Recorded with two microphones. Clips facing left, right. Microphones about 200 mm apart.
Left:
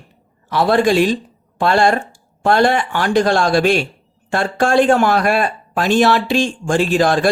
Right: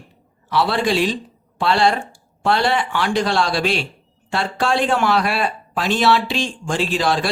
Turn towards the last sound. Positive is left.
turn(degrees=50)  # may be behind; listen again after turning